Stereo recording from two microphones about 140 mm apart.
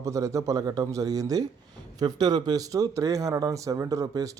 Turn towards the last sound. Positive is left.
turn(degrees=-25)  # may be behind; listen again after turning